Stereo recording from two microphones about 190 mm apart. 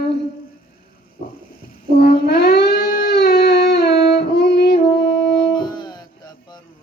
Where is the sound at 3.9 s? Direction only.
60° left (ahead or behind).